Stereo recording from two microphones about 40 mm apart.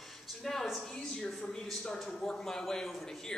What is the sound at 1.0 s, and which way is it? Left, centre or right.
Speech, centre.